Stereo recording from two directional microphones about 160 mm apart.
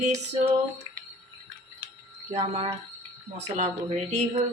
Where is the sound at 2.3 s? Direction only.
35° right (ahead or behind).